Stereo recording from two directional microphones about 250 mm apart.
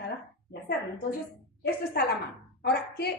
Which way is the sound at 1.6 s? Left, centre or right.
Left.